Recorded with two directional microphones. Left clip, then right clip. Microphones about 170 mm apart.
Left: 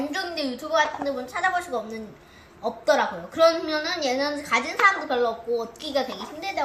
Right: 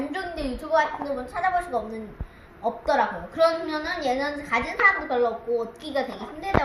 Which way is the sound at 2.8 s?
10° right (ahead or behind).